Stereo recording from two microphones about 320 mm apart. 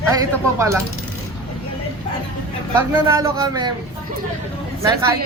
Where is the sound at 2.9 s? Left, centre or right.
Centre.